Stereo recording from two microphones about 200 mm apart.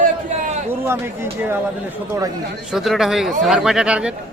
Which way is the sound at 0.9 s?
10° right (ahead or behind).